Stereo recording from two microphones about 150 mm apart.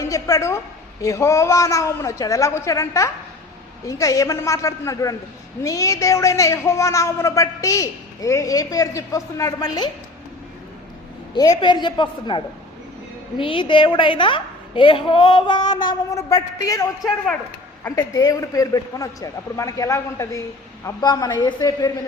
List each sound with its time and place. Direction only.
0.0 s a woman's voice: 20° left (ahead or behind)
11.6 s a woman's voice: 30° left (ahead or behind)